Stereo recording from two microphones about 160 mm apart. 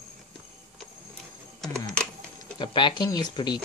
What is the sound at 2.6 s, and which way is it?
Speech, 30° left (ahead or behind).